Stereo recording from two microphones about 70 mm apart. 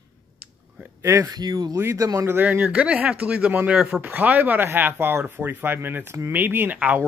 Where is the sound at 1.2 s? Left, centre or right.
Right.